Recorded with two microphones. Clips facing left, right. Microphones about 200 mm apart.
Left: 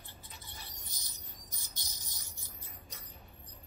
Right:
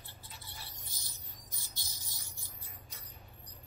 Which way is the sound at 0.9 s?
20° left (ahead or behind).